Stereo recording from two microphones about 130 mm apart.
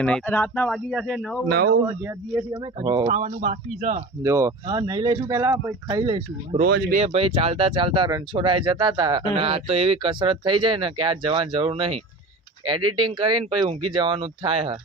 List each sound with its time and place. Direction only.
0.0 s a man's voice: 10° left (ahead or behind)
2.0 s speech: 20° right (ahead or behind)
2.8 s speech: 40° right (ahead or behind)
4.2 s speech: 25° right (ahead or behind)
6.1 s speech: 40° right (ahead or behind)
7.0 s speech: 50° right (ahead or behind); by 9.2 s 35° right (ahead or behind)
9.3 s speech: 45° right (ahead or behind)
12.6 s speech: 35° right (ahead or behind)